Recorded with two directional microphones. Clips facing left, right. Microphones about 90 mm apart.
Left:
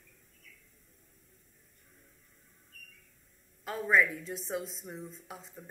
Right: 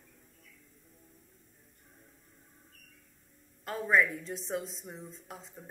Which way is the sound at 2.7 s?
35° right (ahead or behind).